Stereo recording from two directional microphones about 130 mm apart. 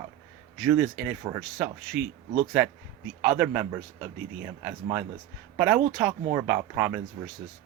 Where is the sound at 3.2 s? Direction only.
10° right (ahead or behind).